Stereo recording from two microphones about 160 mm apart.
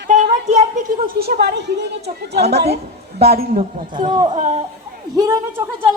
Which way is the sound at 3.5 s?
50° right (ahead or behind).